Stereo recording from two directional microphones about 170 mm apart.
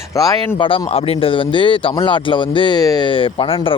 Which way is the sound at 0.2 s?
25° left (ahead or behind).